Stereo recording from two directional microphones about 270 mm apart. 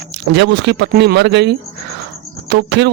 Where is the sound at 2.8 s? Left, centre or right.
Right.